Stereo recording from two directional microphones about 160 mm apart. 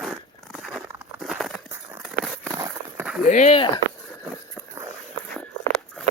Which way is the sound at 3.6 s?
35° left (ahead or behind).